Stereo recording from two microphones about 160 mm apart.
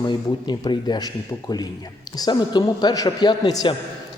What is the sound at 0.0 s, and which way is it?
Speech, 25° left (ahead or behind).